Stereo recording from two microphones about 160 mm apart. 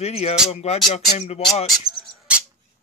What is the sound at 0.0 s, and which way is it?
A man's voice, 40° left (ahead or behind).